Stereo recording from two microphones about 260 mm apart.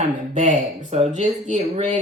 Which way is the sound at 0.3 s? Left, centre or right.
Right.